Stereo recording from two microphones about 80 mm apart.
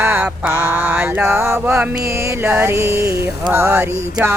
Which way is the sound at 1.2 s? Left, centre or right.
Right.